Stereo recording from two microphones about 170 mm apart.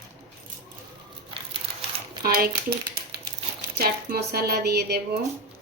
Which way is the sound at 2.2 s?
65° right (ahead or behind).